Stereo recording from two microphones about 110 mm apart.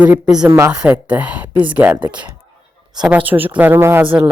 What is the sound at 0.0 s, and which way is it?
Speech, 10° right (ahead or behind).